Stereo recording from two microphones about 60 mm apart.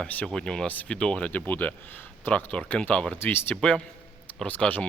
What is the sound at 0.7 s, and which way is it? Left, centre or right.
Speech, left.